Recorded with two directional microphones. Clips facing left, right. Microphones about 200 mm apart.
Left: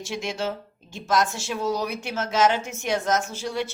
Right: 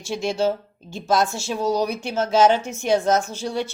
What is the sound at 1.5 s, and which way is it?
Speech, 35° right (ahead or behind).